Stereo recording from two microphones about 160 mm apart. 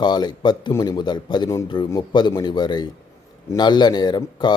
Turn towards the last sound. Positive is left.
turn(degrees=25)  # may be behind; listen again after turning